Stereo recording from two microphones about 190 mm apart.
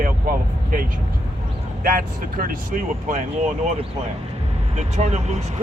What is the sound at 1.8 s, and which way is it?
Speech, 50° right (ahead or behind).